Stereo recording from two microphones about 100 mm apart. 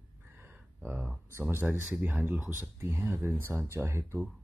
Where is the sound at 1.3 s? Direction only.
25° right (ahead or behind).